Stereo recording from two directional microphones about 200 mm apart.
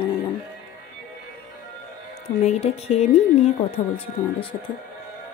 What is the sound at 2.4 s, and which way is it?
A woman's voice, 30° left (ahead or behind).